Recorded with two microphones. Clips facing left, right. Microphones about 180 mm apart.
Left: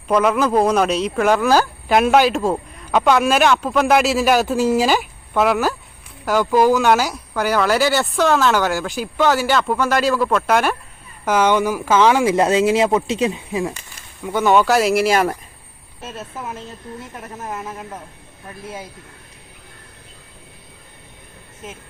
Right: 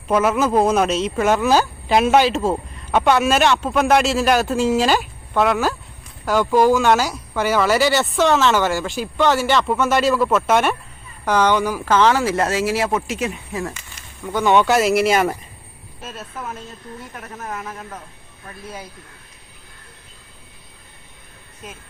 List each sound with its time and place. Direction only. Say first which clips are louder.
0.1 s speech: left 1 dB; 5° right (ahead or behind); by 13.7 s 15° left (ahead or behind)
14.3 s speech: left 1 dB; 5° left (ahead or behind)
17.2 s speech: left 1 dB; 20° left (ahead or behind)